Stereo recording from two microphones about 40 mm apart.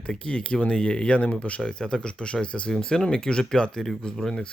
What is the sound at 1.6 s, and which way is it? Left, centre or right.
Speech, centre.